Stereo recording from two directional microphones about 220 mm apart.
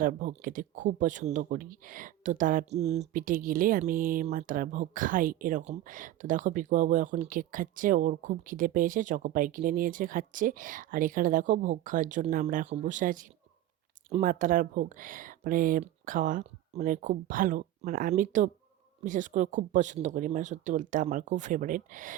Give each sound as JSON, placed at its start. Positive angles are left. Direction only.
{"t": 0.0, "sound": "speech", "side_deg": -35}